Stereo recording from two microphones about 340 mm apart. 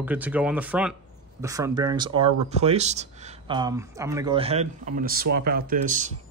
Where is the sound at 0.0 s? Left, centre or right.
Centre.